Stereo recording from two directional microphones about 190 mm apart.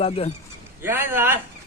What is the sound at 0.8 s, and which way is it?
Speech, 10° right (ahead or behind).